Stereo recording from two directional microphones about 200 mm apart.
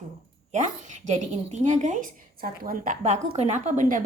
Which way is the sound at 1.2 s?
35° right (ahead or behind).